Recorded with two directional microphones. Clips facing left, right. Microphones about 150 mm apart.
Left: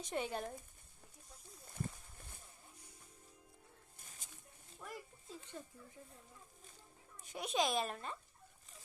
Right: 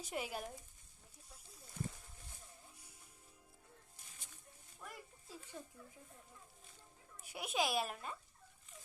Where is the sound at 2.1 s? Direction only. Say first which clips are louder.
Left 2 dB; 50° left (ahead or behind).